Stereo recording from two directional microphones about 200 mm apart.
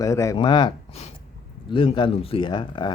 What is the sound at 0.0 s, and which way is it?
Speech, 15° left (ahead or behind).